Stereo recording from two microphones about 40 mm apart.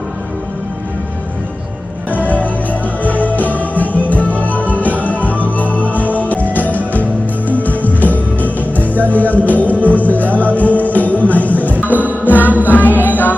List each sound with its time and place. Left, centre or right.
2.2 s music: left
11.7 s music: right